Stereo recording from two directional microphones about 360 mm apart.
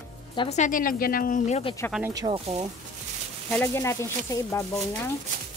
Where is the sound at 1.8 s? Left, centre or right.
Centre.